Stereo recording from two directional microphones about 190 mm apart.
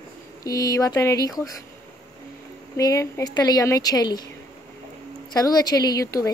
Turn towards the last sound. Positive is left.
turn(degrees=20)  # may be behind; listen again after turning